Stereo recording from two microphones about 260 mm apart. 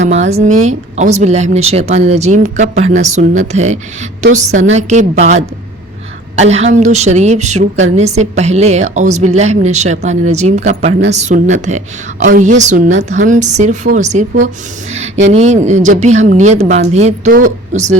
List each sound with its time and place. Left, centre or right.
0.3 s a woman's voice: right